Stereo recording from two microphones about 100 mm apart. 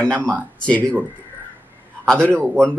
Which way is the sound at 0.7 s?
10° left (ahead or behind).